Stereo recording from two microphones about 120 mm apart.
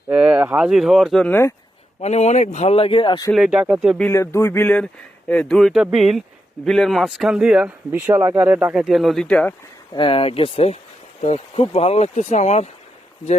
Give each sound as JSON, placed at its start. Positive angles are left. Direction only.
{"t": 0.1, "sound": "speech", "side_deg": -10}
{"t": 1.3, "sound": "a sound", "side_deg": 20}
{"t": 2.0, "sound": "speech", "side_deg": 65}
{"t": 3.3, "sound": "speech", "side_deg": -5}
{"t": 4.1, "sound": "a sound", "side_deg": 25}
{"t": 5.3, "sound": "speech", "side_deg": 5}
{"t": 7.9, "sound": "speech", "side_deg": -20}
{"t": 8.7, "sound": "speech", "side_deg": -5}
{"t": 9.9, "sound": "speech", "side_deg": 45}
{"t": 11.2, "sound": "speech", "side_deg": 65}